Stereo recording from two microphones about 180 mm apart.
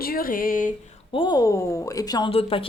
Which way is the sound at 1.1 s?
25° left (ahead or behind).